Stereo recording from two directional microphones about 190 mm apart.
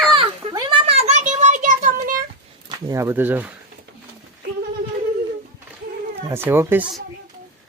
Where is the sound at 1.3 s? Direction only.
40° right (ahead or behind).